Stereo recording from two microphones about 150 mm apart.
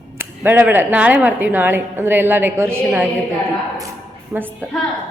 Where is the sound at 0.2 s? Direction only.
15° right (ahead or behind).